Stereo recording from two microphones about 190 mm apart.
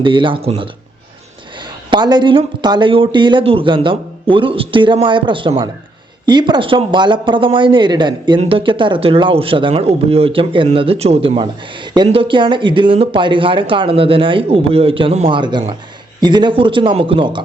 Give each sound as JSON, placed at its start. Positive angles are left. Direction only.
{"t": 0.0, "sound": "speech", "side_deg": -25}